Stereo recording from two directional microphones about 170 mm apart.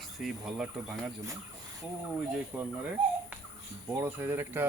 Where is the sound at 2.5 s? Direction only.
5° right (ahead or behind).